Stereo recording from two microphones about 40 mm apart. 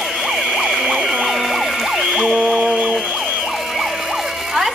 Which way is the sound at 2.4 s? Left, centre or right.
Centre.